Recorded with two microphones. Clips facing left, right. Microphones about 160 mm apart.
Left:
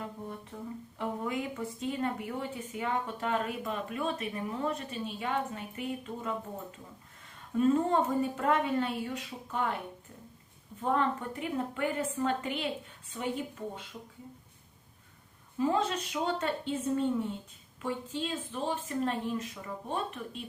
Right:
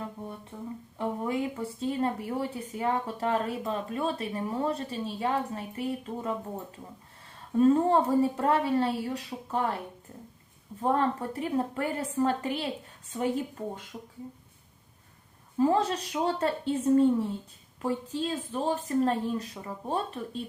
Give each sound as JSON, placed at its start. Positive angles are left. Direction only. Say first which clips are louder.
{"t": 0.5, "sound": "humming", "louder": "right 3 dB", "side_deg": -5}
{"t": 0.9, "sound": "speech", "louder": "right 4 dB", "side_deg": -30}
{"t": 7.6, "sound": "speech", "louder": "right 4 dB", "side_deg": -35}
{"t": 10.8, "sound": "a woman's voice", "louder": "right 3 dB", "side_deg": -35}
{"t": 15.5, "sound": "speech", "louder": "right 4 dB", "side_deg": -35}